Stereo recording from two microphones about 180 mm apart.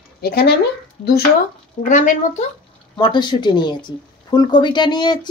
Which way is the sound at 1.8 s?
45° left (ahead or behind).